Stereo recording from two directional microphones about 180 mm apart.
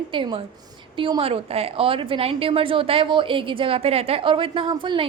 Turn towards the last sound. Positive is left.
turn(degrees=-25)  # may be behind; listen again after turning